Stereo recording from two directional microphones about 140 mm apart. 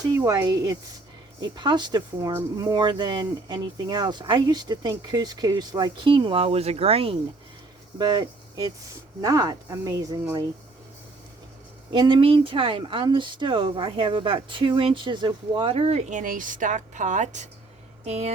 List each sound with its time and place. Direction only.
0.1 s speech: 25° right (ahead or behind); by 7.2 s 45° right (ahead or behind)
7.9 s speech: 30° right (ahead or behind)
11.9 s speech: 35° right (ahead or behind); by 18.3 s 50° right (ahead or behind)